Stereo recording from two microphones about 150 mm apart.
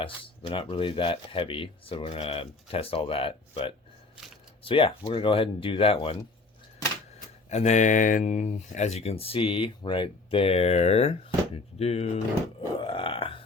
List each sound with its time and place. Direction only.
0.0 s speech: 35° left (ahead or behind)
7.5 s speech: 50° left (ahead or behind)
12.8 s burping: 35° left (ahead or behind)